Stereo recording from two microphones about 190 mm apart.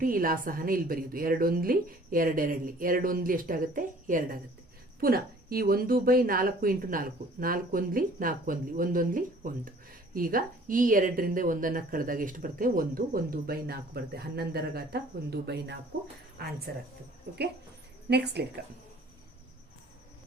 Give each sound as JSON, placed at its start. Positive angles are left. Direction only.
{"t": 0.0, "sound": "speech", "side_deg": -45}